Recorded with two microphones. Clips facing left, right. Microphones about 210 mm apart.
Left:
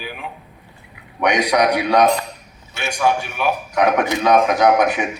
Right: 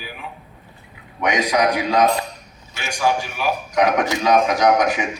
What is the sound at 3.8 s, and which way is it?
Speech, 60° left (ahead or behind).